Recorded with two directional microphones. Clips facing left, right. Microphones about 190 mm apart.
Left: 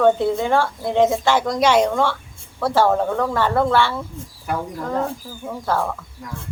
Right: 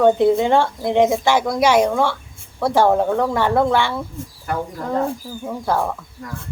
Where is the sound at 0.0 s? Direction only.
15° right (ahead or behind).